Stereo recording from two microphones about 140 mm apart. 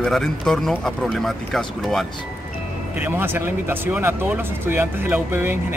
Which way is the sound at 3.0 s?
15° right (ahead or behind).